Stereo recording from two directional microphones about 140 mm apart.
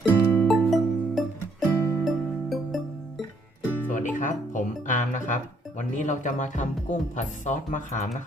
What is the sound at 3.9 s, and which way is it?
Music, 70° left (ahead or behind).